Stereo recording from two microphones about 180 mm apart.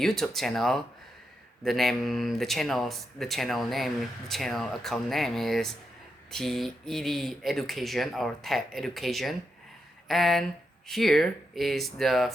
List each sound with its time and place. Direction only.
0.0 s speech: centre (ahead or behind)